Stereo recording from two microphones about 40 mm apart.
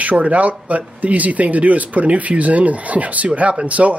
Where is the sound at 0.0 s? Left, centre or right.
Right.